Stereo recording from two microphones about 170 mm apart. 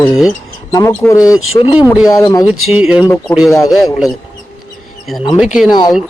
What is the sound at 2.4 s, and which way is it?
Speech, 5° right (ahead or behind).